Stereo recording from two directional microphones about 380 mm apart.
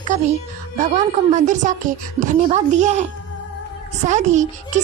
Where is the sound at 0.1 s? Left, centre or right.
Centre.